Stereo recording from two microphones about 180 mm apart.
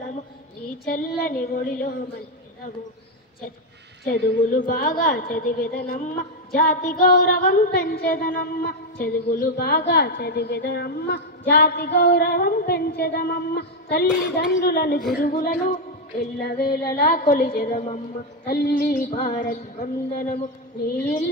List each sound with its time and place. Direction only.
0.8 s speech: 45° left (ahead or behind)
4.0 s a woman's voice: 50° left (ahead or behind)
18.5 s speech: 55° left (ahead or behind)